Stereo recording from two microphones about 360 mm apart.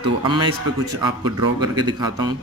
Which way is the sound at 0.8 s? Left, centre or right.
Right.